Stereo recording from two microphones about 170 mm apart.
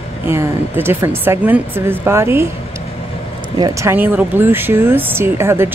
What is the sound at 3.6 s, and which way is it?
Speech, 20° right (ahead or behind).